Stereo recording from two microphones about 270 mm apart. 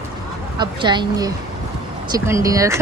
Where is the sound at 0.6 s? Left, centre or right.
Centre.